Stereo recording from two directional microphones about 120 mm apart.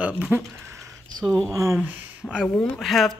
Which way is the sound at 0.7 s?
25° right (ahead or behind).